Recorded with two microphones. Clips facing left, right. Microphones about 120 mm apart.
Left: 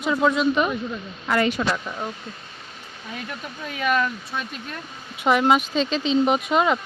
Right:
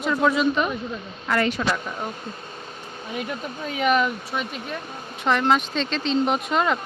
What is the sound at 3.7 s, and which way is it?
Speech, 20° right (ahead or behind).